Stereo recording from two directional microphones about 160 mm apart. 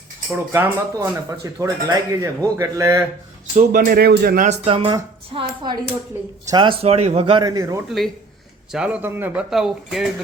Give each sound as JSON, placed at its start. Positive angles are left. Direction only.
{"t": 0.5, "sound": "speech", "side_deg": -15}
{"t": 3.5, "sound": "speech", "side_deg": -45}
{"t": 3.8, "sound": "speech", "side_deg": -75}
{"t": 4.4, "sound": "a man's voice", "side_deg": -35}
{"t": 6.8, "sound": "a man's voice", "side_deg": -40}
{"t": 7.9, "sound": "a man's voice", "side_deg": 0}